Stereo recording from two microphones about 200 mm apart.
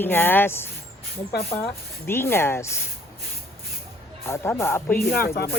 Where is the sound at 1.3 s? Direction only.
50° left (ahead or behind).